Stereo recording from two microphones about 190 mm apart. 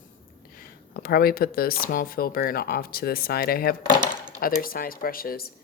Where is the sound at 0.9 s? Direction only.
50° left (ahead or behind).